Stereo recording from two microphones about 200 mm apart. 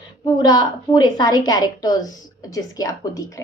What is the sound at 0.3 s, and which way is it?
A woman's voice, 20° left (ahead or behind).